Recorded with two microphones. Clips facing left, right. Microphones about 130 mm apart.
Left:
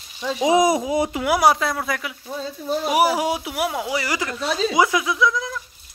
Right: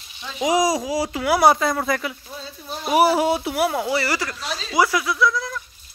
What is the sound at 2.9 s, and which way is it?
Speech, 10° left (ahead or behind).